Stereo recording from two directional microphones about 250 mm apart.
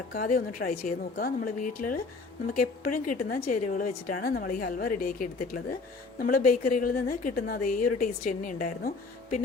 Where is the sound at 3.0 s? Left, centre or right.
Left.